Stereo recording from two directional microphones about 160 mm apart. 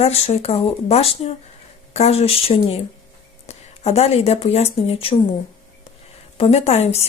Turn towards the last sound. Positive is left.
turn(degrees=40)  # may be behind; listen again after turning